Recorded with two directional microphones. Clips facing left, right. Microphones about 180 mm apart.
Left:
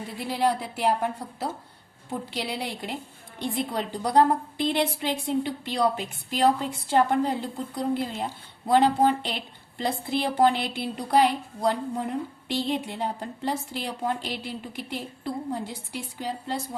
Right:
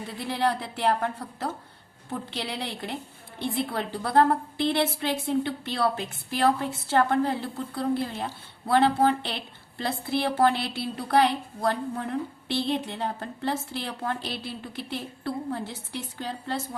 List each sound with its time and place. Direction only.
0.2 s a woman's voice: 10° left (ahead or behind)